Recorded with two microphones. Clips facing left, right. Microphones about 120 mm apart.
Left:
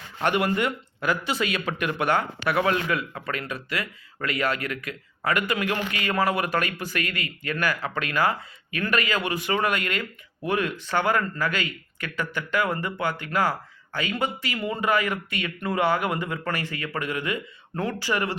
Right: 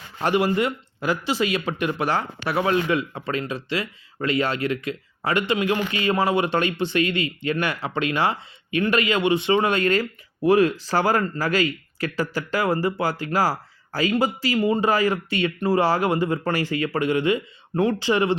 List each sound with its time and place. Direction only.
0.2 s speech: 30° right (ahead or behind)